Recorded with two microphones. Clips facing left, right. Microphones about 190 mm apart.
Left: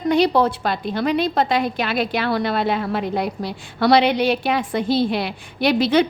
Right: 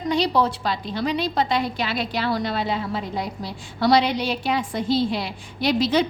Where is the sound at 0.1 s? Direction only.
55° left (ahead or behind).